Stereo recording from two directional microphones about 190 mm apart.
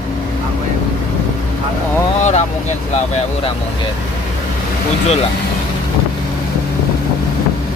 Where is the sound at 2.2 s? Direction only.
40° left (ahead or behind).